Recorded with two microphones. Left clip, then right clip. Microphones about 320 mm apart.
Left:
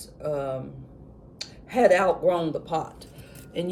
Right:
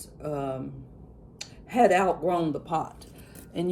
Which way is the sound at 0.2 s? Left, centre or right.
Right.